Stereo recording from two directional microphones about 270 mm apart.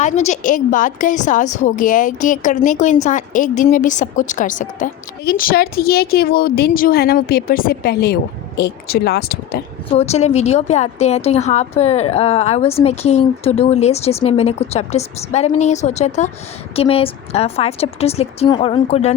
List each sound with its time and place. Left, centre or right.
0.0 s a woman's voice: left
9.9 s a woman's voice: left